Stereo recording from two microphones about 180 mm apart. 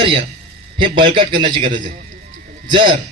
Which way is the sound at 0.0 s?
30° right (ahead or behind).